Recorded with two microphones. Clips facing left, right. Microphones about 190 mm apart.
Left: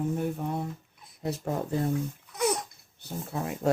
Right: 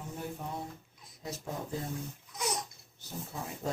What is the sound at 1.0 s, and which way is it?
Speech, 60° left (ahead or behind).